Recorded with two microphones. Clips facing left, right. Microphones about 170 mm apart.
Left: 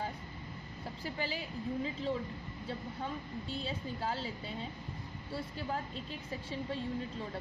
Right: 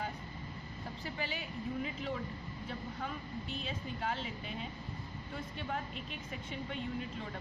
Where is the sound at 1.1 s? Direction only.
30° left (ahead or behind).